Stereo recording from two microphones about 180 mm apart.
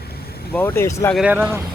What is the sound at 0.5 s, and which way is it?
Speech, 10° left (ahead or behind).